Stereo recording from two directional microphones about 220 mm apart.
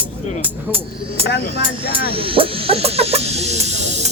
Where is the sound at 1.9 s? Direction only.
25° right (ahead or behind).